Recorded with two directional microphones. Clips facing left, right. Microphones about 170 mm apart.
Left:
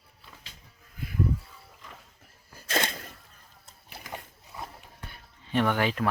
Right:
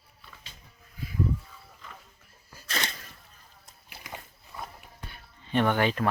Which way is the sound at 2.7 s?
50° left (ahead or behind).